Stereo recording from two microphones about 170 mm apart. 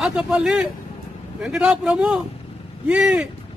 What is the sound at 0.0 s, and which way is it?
A man's voice, 5° right (ahead or behind).